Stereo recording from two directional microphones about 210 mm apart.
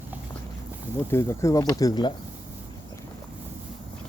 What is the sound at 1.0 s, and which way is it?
Speech, 15° left (ahead or behind).